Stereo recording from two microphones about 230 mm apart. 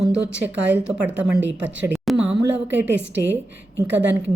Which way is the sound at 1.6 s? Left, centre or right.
Centre.